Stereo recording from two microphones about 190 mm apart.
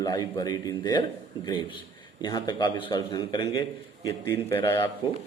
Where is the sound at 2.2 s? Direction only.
25° left (ahead or behind).